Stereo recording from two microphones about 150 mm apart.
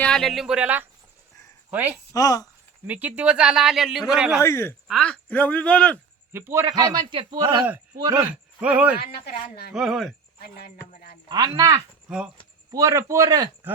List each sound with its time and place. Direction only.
0.0 s speech: 5° left (ahead or behind)
2.1 s speech: 25° left (ahead or behind)
2.8 s speech: 10° right (ahead or behind)
4.4 s speech: 20° left (ahead or behind)
4.9 s speech: 5° left (ahead or behind)
6.3 s a man's voice: 15° right (ahead or behind)
8.3 s speech: 10° right (ahead or behind)
11.3 s a man's voice: 25° right (ahead or behind)
12.0 s speech: 5° right (ahead or behind)
12.7 s a man's voice: 20° right (ahead or behind)